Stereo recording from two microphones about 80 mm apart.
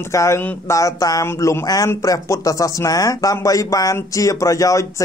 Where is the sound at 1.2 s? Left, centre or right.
Left.